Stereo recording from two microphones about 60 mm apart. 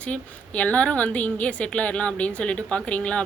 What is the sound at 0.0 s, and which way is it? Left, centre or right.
A woman's voice, left.